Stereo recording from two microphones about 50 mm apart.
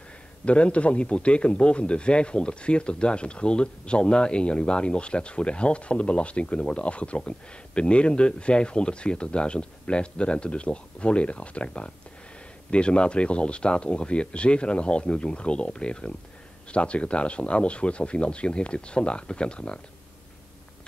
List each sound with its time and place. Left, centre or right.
0.5 s a man's voice: left